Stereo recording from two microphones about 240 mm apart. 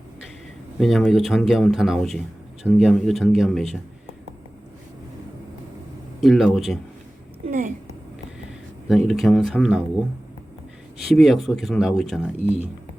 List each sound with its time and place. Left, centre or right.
0.8 s speech: centre
6.1 s speech: centre
7.5 s a woman's voice: right
8.9 s speech: centre
11.1 s speech: centre